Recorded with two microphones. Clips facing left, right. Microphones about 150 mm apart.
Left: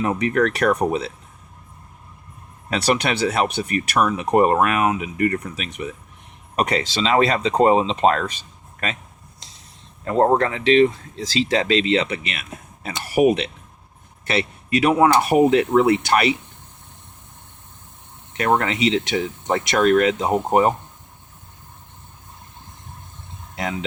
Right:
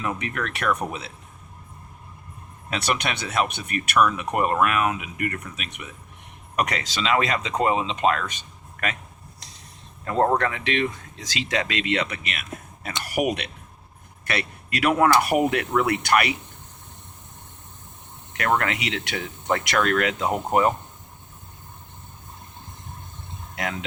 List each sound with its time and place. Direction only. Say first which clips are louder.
0.0 s speech: left 9 dB; 35° left (ahead or behind)
2.6 s speech: left 6 dB; 35° left (ahead or behind)
10.0 s speech: left 4 dB; 30° left (ahead or behind)
18.3 s speech: left 4 dB; 25° left (ahead or behind)